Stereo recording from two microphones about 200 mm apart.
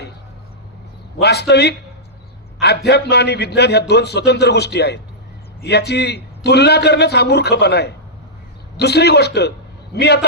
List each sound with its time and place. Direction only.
1.2 s a man's voice: 55° left (ahead or behind)